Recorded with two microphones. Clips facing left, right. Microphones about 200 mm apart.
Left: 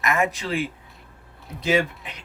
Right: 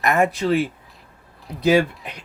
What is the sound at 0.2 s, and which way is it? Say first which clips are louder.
Speech: right 6 dB; 40° right (ahead or behind).